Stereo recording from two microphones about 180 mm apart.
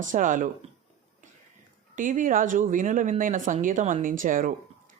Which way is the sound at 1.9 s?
45° right (ahead or behind).